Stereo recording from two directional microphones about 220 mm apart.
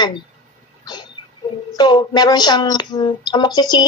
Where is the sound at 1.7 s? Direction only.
20° left (ahead or behind).